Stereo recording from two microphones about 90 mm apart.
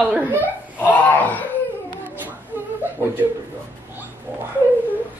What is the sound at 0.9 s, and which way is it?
Wail, 20° left (ahead or behind).